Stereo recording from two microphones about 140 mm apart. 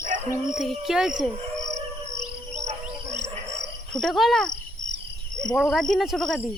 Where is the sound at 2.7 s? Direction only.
55° right (ahead or behind).